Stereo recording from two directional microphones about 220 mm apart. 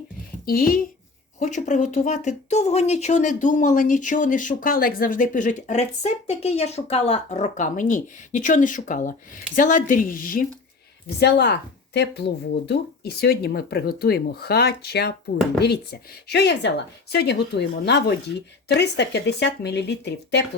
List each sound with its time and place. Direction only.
0.4 s speech: 40° left (ahead or behind)
11.2 s speech: 50° left (ahead or behind)